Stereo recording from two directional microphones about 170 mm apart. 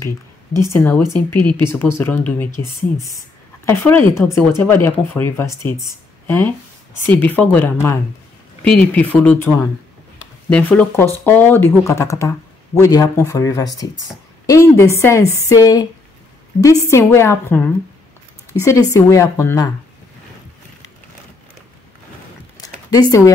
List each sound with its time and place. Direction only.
0.6 s speech: 15° left (ahead or behind)
10.5 s a woman's voice: 10° left (ahead or behind)
22.6 s a sound: 20° left (ahead or behind)